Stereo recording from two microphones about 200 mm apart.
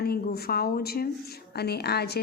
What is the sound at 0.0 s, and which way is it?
A woman's voice, 50° left (ahead or behind).